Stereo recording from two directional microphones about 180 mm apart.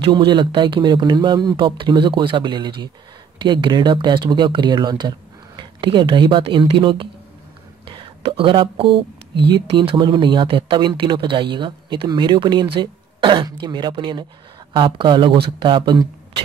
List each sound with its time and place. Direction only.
0.0 s speech: 25° right (ahead or behind)